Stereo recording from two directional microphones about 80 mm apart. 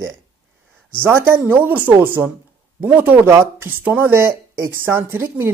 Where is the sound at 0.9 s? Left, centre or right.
Right.